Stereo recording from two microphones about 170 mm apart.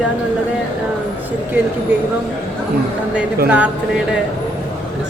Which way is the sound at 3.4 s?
10° right (ahead or behind).